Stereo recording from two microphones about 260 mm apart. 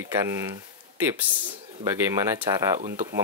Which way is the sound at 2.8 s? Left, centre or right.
Right.